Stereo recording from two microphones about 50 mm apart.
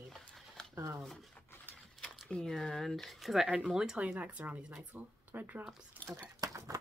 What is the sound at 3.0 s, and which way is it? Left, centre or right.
Speech, centre.